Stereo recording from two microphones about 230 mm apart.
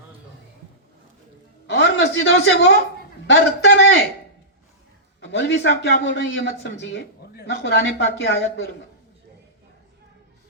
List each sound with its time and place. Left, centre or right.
1.6 s a woman's voice: left
5.2 s a man's voice: left